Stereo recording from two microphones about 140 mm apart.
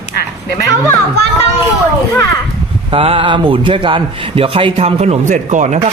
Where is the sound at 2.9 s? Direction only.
40° right (ahead or behind).